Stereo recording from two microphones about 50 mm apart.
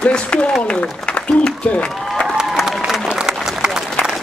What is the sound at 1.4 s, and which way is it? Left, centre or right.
Speech, left.